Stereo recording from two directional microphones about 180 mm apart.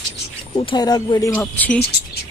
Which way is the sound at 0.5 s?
25° left (ahead or behind).